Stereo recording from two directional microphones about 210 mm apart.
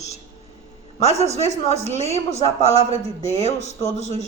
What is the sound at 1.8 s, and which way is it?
Speech, 30° right (ahead or behind).